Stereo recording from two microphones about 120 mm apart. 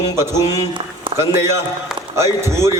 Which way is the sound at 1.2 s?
20° right (ahead or behind).